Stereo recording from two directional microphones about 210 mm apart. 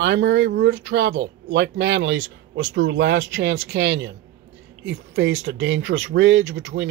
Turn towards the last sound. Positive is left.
turn(degrees=-60)  # may be behind; listen again after turning